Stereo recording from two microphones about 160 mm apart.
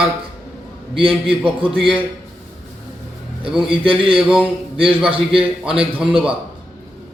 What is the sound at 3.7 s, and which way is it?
Speech, 35° right (ahead or behind).